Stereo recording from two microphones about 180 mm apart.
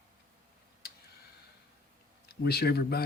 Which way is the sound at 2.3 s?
65° left (ahead or behind).